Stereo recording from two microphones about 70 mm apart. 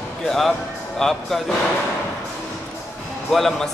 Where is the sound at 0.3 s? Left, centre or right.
Centre.